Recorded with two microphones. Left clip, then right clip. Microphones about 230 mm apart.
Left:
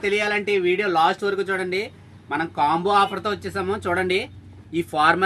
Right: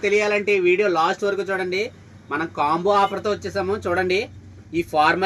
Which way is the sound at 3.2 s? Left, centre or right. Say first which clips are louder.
Right 2 dB; centre.